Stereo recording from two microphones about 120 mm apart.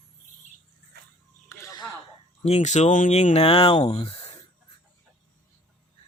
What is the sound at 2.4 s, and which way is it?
Speech, 70° left (ahead or behind).